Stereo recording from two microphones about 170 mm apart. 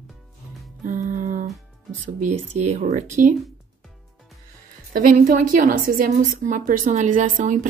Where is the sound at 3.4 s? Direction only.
Centre (ahead or behind).